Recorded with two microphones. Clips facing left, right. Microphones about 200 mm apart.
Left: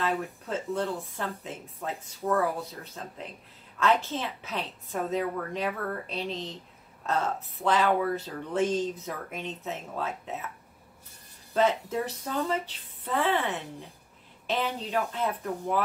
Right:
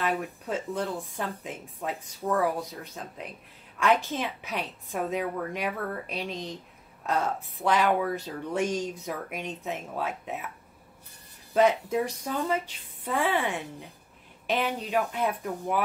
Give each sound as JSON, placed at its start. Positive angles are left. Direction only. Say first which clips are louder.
{"t": 0.0, "sound": "a woman's voice", "louder": "even", "side_deg": -15}
{"t": 11.5, "sound": "a woman's voice", "louder": "right 3 dB", "side_deg": -15}